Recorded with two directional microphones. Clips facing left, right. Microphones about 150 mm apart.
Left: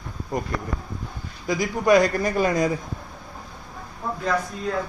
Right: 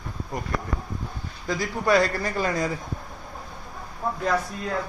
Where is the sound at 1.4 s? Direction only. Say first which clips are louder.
Left 3 dB; 15° left (ahead or behind).